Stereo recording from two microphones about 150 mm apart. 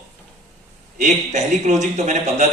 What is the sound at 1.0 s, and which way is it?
A man's voice, 50° right (ahead or behind).